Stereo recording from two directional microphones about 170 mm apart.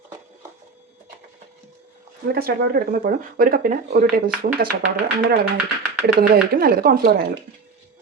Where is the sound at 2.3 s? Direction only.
65° right (ahead or behind).